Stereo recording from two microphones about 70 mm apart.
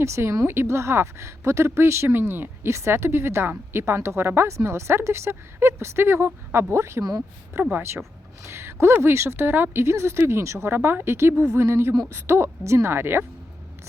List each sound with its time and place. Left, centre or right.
0.0 s a woman's voice: right
10.8 s a woman's voice: right